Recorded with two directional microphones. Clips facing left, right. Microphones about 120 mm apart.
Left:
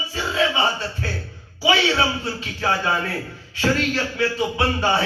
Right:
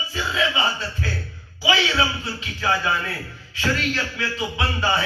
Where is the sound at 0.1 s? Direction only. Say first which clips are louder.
Left 2 dB; 30° left (ahead or behind).